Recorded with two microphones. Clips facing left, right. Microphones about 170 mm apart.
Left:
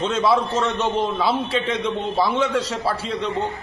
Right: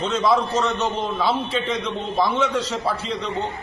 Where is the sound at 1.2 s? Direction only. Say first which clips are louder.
Left 1 dB; 5° left (ahead or behind).